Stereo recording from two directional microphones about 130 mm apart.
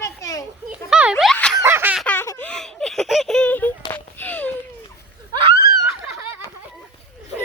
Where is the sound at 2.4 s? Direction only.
5° left (ahead or behind).